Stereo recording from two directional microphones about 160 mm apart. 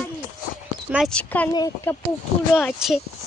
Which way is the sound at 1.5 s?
20° left (ahead or behind).